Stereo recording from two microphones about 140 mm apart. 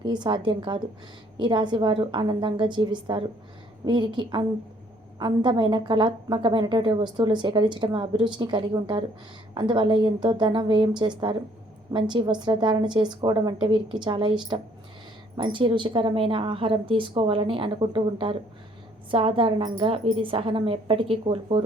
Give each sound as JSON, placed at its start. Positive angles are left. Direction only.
{"t": 0.0, "sound": "a woman's voice", "side_deg": -30}